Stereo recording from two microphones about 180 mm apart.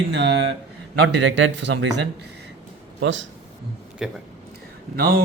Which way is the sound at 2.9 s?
90° right.